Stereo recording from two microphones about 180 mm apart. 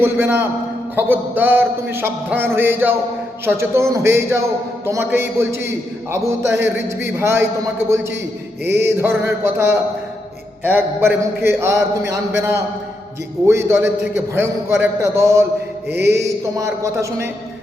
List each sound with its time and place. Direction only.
0.0 s a man's voice: 10° right (ahead or behind)
8.8 s a man's voice: 15° right (ahead or behind)